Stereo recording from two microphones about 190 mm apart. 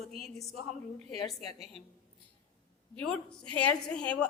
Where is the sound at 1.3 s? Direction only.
Centre (ahead or behind).